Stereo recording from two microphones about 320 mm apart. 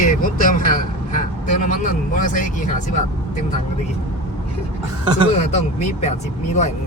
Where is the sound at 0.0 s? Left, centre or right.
Left.